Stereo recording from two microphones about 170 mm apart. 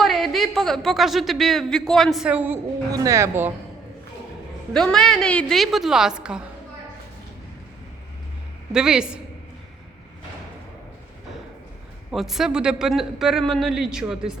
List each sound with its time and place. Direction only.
0.0 s speech: centre (ahead or behind)
2.9 s speech: 20° right (ahead or behind)
4.7 s speech: 5° left (ahead or behind)
8.7 s speech: 5° right (ahead or behind)
12.1 s speech: centre (ahead or behind)